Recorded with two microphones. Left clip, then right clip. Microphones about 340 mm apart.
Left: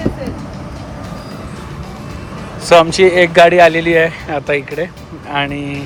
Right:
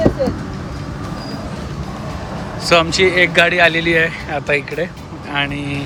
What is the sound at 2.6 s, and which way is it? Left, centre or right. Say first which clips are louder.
Speech: left 5 dB; centre.